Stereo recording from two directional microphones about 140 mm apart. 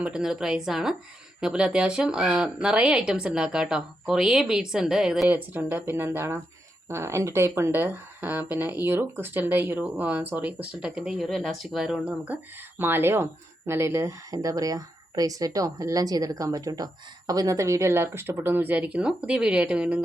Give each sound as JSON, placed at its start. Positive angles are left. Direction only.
{"t": 0.0, "sound": "speech", "side_deg": -5}
{"t": 5.5, "sound": "speech", "side_deg": -15}